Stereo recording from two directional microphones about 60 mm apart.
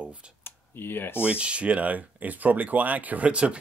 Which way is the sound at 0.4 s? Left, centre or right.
Left.